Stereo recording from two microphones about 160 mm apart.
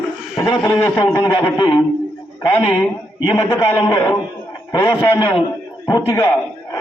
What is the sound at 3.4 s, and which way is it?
A man's voice, 30° left (ahead or behind).